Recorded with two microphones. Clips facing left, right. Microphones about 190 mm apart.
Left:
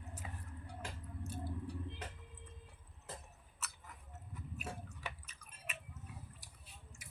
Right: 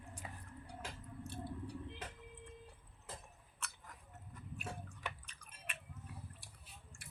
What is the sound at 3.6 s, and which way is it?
Chewing, 5° left (ahead or behind).